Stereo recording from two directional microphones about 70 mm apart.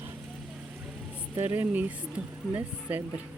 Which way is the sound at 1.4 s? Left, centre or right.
Right.